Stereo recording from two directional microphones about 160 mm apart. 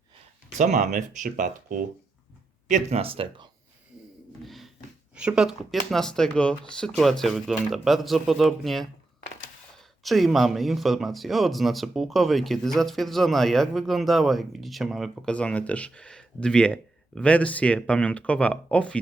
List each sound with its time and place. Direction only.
0.6 s speech: 50° right (ahead or behind)
2.6 s speech: 45° right (ahead or behind)
4.4 s a sound: centre (ahead or behind)
5.1 s speech: 5° right (ahead or behind)
10.0 s speech: centre (ahead or behind)